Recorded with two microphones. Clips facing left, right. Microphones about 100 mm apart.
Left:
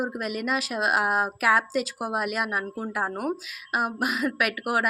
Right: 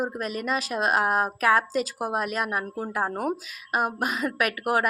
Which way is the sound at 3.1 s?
15° right (ahead or behind).